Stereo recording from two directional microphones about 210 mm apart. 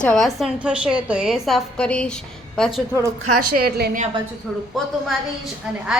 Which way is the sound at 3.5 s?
45° right (ahead or behind).